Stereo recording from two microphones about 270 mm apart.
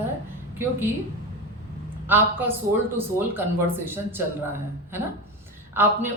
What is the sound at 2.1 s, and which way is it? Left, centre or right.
Speech, centre.